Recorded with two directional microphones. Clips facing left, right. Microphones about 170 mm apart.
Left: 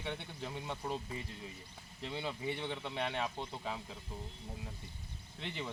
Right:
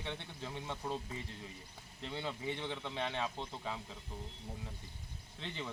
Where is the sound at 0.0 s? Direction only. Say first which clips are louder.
Left 2 dB; 15° left (ahead or behind).